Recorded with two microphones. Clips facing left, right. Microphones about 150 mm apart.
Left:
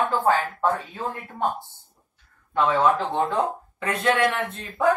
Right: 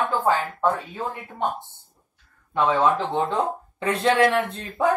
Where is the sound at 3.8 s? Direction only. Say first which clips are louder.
Right 3 dB; 30° right (ahead or behind).